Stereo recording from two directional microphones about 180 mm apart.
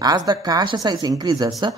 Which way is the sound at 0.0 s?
20° right (ahead or behind).